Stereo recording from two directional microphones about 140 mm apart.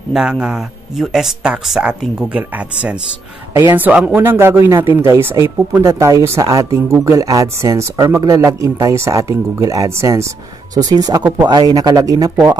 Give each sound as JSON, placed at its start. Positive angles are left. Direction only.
{"t": 0.1, "sound": "speech", "side_deg": -5}